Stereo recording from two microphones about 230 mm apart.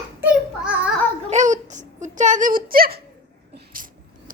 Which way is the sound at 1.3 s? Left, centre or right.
Right.